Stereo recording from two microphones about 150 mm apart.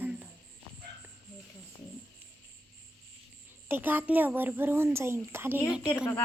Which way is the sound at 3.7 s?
15° right (ahead or behind).